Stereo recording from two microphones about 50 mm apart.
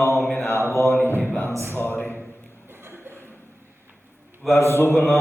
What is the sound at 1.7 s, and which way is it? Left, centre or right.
Speech, left.